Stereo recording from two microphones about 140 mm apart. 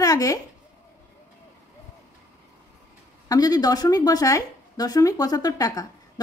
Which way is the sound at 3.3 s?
25° left (ahead or behind).